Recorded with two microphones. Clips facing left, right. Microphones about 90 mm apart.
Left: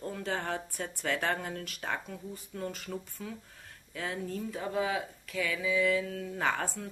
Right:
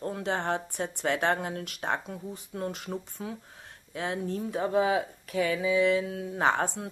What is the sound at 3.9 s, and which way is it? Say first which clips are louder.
A woman's voice: right 4 dB; 30° right (ahead or behind).